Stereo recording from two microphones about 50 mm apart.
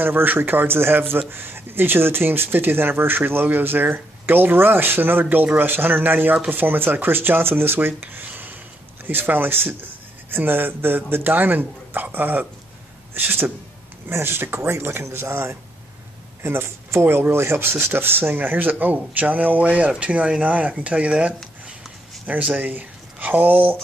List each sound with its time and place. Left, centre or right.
0.0 s speech: right
15.0 s speech: right
16.4 s speech: right